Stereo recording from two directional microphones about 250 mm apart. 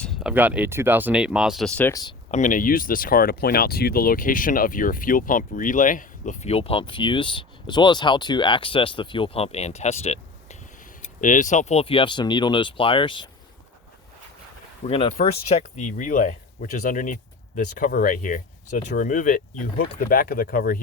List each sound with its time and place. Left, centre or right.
0.0 s speech: centre
2.3 s speech: left
14.8 s speech: left